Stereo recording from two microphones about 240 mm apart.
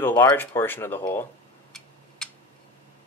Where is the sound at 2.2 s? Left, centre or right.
Centre.